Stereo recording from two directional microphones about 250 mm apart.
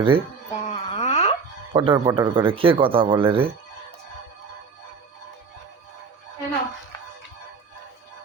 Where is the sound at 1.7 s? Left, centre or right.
Centre.